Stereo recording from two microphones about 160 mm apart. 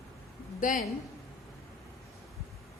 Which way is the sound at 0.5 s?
55° left (ahead or behind).